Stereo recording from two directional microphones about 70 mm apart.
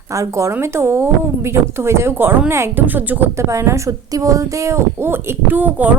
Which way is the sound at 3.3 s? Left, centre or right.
Right.